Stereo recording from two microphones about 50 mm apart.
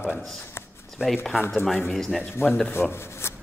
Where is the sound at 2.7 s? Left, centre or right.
Left.